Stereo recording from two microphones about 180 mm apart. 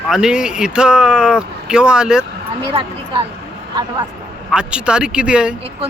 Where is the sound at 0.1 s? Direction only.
5° right (ahead or behind).